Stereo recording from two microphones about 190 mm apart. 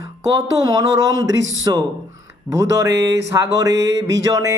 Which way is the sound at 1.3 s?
85° right.